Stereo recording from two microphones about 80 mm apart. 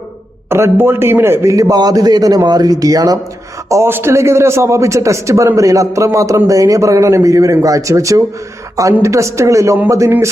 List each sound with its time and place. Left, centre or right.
0.5 s a man's voice: right
1.5 s a man's voice: right
3.8 s a man's voice: right